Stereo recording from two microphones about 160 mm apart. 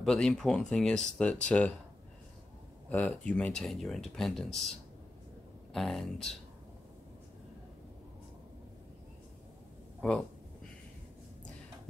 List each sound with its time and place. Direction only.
0.0 s speech: 5° left (ahead or behind)
2.9 s speech: 10° left (ahead or behind)
5.7 s speech: centre (ahead or behind)